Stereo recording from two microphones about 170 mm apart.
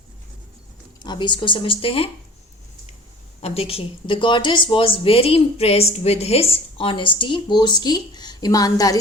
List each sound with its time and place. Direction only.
1.0 s speech: 25° left (ahead or behind)
3.4 s speech: 35° left (ahead or behind)